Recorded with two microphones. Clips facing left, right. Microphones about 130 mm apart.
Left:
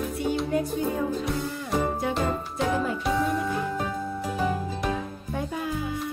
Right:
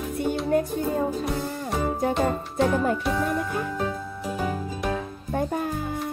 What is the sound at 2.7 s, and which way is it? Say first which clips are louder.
Music: right 3 dB; 50° right (ahead or behind).